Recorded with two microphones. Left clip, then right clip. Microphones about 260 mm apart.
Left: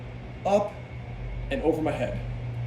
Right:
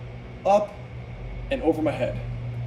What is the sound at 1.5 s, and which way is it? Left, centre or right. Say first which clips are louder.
Speech: right 2 dB; centre.